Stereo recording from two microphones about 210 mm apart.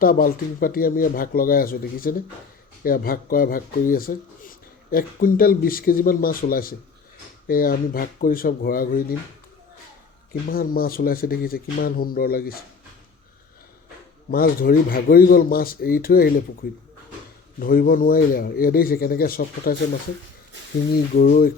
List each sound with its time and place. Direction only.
0.0 s speech: 45° left (ahead or behind)
10.5 s speech: 45° left (ahead or behind)
14.3 s speech: 45° left (ahead or behind)
20.9 s speech: 45° left (ahead or behind)